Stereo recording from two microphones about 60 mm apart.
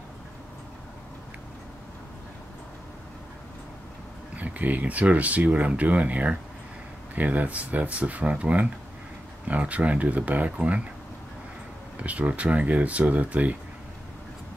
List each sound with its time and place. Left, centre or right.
4.4 s speech: right
12.0 s speech: right